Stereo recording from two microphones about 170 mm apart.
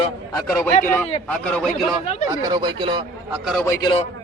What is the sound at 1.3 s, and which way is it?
Speech, 5° left (ahead or behind).